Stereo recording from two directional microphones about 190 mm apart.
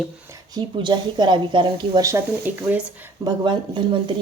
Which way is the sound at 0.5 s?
25° right (ahead or behind).